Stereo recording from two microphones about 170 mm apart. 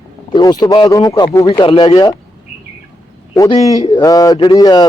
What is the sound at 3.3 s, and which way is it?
Speech, 20° left (ahead or behind).